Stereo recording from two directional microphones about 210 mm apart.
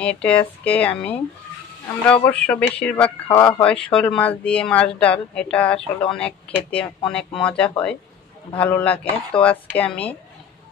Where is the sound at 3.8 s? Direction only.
5° left (ahead or behind).